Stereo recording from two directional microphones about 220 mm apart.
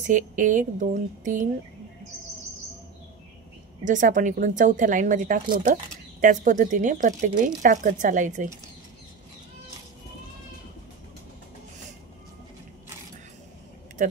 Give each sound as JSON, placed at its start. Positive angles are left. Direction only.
{"t": 0.0, "sound": "speech", "side_deg": -35}
{"t": 3.8, "sound": "speech", "side_deg": -35}